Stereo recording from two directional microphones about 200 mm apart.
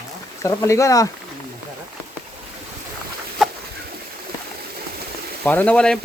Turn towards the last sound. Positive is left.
turn(degrees=5)  # may be behind; listen again after turning